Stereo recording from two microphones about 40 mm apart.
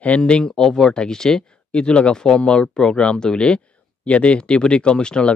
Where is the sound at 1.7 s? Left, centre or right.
Left.